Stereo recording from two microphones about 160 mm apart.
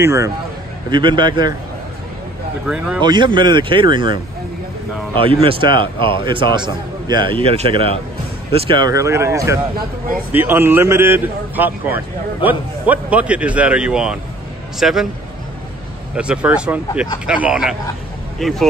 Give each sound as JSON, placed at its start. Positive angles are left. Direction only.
{"t": 0.0, "sound": "a man's voice", "side_deg": -20}
{"t": 0.8, "sound": "speech", "side_deg": -30}
{"t": 2.6, "sound": "a man's voice", "side_deg": -5}
{"t": 3.0, "sound": "speech", "side_deg": -30}
{"t": 5.2, "sound": "a man's voice", "side_deg": -35}
{"t": 16.2, "sound": "a man's voice", "side_deg": -5}